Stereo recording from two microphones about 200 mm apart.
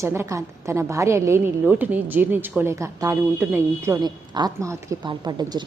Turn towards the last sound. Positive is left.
turn(degrees=-20)  # may be behind; listen again after turning